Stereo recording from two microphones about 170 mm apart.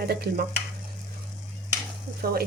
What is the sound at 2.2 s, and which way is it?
Speech, 60° right (ahead or behind).